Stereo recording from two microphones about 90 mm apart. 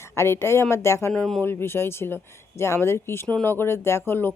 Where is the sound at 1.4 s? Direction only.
25° left (ahead or behind).